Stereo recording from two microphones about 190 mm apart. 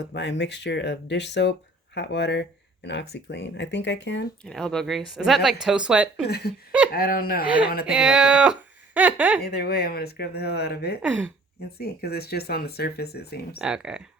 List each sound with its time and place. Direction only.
0.1 s speech: 65° left (ahead or behind)
4.4 s speech: centre (ahead or behind)
6.2 s speech: 60° left (ahead or behind)
6.7 s a sound: 5° right (ahead or behind)
6.9 s speech: 50° left (ahead or behind)
7.4 s speech: 5° right (ahead or behind)
9.4 s speech: 55° left (ahead or behind)
13.6 s speech: 5° right (ahead or behind)